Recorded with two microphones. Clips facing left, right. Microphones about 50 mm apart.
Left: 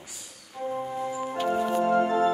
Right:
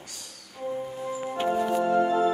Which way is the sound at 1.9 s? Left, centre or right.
Left.